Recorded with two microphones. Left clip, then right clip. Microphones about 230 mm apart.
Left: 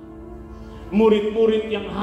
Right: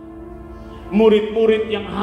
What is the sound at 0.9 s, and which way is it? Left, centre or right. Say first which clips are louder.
Speech: right 3 dB; right.